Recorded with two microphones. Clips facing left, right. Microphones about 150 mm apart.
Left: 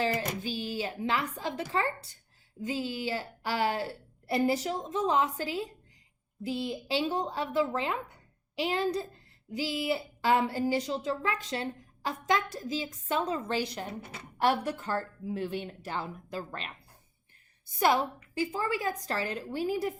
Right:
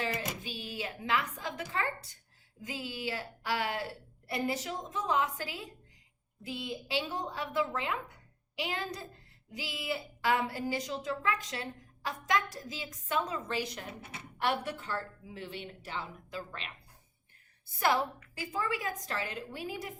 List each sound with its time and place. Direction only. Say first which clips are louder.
0.0 s a woman's voice: left 6 dB; 30° left (ahead or behind)
17.7 s a woman's voice: left 3 dB; 20° left (ahead or behind); by 19.9 s 35° left (ahead or behind)